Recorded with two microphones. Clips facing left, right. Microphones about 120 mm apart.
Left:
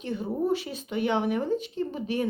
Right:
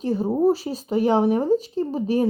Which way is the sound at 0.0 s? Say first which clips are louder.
Right 9 dB; 35° right (ahead or behind).